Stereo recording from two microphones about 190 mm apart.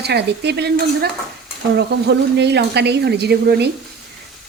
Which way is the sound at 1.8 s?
60° right (ahead or behind).